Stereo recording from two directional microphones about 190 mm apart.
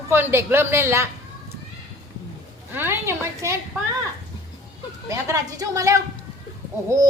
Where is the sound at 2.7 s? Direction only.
10° right (ahead or behind).